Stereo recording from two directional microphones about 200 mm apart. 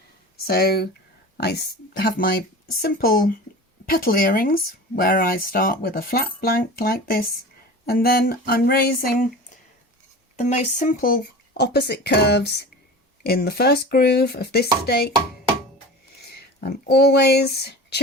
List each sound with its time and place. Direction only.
0.4 s speech: 50° left (ahead or behind)
10.3 s speech: 35° left (ahead or behind); by 15.1 s 50° left (ahead or behind)
16.1 s speech: 50° left (ahead or behind)